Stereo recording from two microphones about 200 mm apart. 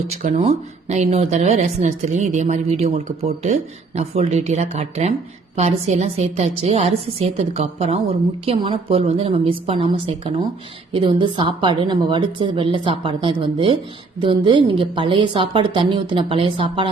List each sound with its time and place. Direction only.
0.1 s a woman's voice: 35° right (ahead or behind)